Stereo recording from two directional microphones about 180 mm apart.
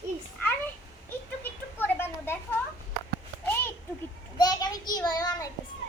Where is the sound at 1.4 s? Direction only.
10° left (ahead or behind).